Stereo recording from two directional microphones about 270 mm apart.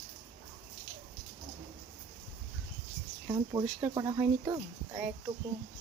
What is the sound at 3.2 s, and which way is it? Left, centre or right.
Speech, centre.